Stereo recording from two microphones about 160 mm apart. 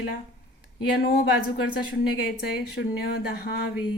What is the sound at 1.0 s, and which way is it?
Speech, 75° left (ahead or behind).